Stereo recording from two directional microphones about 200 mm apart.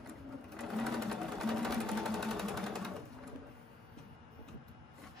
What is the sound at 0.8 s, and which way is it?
Sewing machine, centre (ahead or behind).